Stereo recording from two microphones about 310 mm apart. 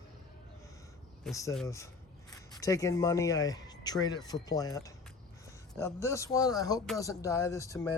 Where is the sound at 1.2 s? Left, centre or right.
Centre.